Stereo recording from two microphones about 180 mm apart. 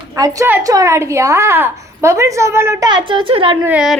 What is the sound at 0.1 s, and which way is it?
A woman's voice, 15° right (ahead or behind).